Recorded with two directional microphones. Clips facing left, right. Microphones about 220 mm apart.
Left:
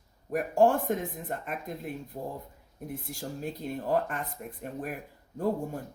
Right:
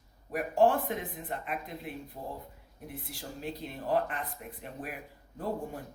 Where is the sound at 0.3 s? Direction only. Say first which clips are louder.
Left 2 dB; 45° left (ahead or behind).